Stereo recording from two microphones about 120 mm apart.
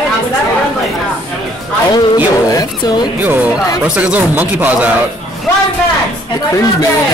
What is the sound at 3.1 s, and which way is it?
Speech, 15° right (ahead or behind).